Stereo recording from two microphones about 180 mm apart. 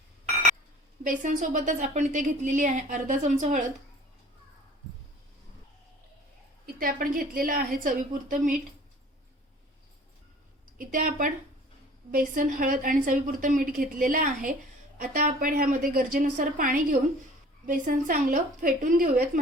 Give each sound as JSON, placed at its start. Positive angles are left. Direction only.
{"t": 1.0, "sound": "a woman's voice", "side_deg": -45}
{"t": 6.7, "sound": "a woman's voice", "side_deg": -50}
{"t": 10.8, "sound": "a woman's voice", "side_deg": -50}